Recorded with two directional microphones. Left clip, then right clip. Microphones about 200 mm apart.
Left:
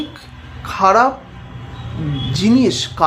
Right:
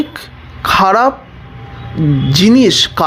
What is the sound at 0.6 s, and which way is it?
Speech, 30° right (ahead or behind).